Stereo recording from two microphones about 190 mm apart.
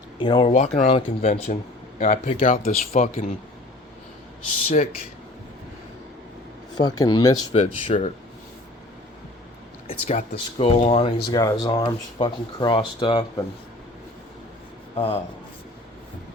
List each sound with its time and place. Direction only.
0.2 s speech: 25° left (ahead or behind); by 3.2 s 45° left (ahead or behind)
6.7 s speech: 20° left (ahead or behind)
7.5 s speech: 35° left (ahead or behind)
9.8 s speech: 35° left (ahead or behind)
11.3 s speech: 20° left (ahead or behind)
14.9 s speech: 30° left (ahead or behind)